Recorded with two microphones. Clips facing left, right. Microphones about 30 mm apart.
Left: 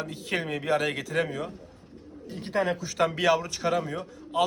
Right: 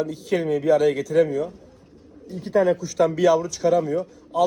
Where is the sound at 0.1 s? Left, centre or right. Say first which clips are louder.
Right 7 dB; left.